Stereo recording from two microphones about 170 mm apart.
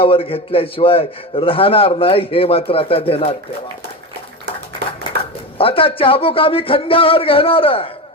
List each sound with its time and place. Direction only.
0.0 s a man's voice: 35° left (ahead or behind)
5.1 s a sound: 75° right (ahead or behind)
5.5 s a man's voice: 35° left (ahead or behind)